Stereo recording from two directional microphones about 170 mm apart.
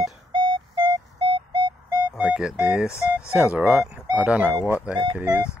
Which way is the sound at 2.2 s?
5° right (ahead or behind).